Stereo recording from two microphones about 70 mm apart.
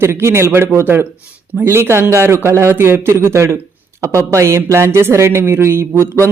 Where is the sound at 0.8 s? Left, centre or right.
Right.